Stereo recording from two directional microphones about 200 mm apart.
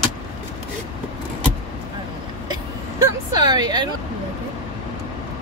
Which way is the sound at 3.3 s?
20° right (ahead or behind).